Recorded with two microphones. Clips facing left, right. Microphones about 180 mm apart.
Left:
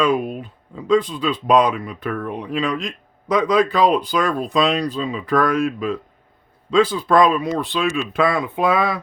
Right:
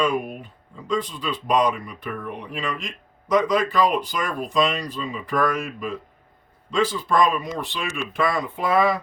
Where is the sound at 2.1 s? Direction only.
80° left.